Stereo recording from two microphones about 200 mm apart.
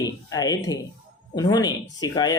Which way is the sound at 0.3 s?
20° left (ahead or behind).